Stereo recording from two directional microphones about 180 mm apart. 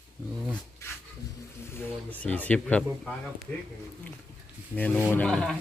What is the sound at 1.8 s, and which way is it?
Speech, 10° left (ahead or behind).